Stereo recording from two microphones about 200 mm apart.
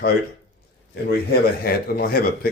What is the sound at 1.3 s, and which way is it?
Speech, 50° left (ahead or behind).